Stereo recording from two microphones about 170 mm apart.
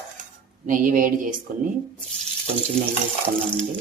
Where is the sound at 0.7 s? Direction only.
55° right (ahead or behind).